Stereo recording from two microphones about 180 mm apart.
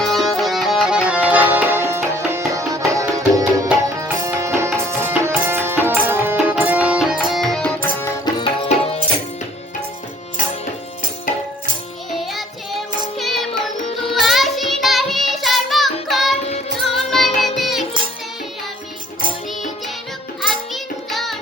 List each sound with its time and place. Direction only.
0.0 s music: centre (ahead or behind)
6.1 s tabla: 10° right (ahead or behind); by 8.1 s 10° left (ahead or behind)
8.2 s tabla: 25° left (ahead or behind)
12.1 s music: centre (ahead or behind)
20.7 s music: centre (ahead or behind)